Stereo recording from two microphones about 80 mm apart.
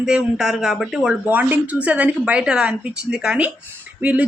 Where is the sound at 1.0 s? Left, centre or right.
Centre.